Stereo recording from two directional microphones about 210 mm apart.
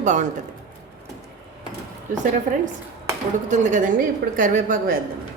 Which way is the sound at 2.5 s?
40° right (ahead or behind).